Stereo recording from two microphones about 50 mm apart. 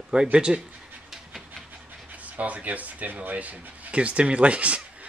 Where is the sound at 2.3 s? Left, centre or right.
Right.